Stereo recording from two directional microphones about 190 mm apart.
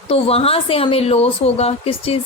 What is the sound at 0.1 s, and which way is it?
A woman's voice, 30° left (ahead or behind).